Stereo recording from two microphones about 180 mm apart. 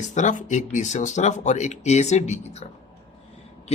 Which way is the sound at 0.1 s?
40° left (ahead or behind).